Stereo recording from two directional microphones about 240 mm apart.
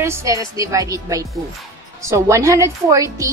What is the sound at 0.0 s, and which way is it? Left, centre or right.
A woman's voice, centre.